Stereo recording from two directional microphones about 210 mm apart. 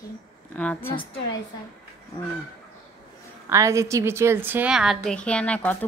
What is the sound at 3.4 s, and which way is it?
A woman's voice, 15° right (ahead or behind).